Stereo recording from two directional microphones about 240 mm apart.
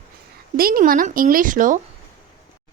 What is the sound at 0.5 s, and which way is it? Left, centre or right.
A child's voice, right.